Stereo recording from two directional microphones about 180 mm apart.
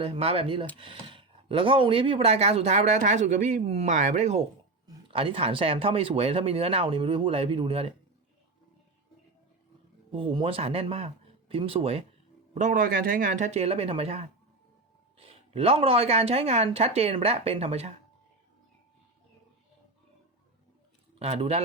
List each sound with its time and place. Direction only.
0.0 s speech: 30° right (ahead or behind)
10.1 s speech: 30° right (ahead or behind)
12.5 s speech: 45° right (ahead or behind)
13.5 s speech: 35° right (ahead or behind)
21.2 s speech: 35° right (ahead or behind)